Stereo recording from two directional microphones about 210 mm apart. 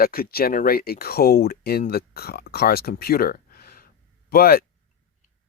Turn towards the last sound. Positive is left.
turn(degrees=45)  # may be behind; listen again after turning